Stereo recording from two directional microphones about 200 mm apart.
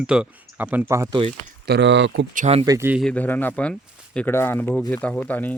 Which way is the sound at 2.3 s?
30° right (ahead or behind).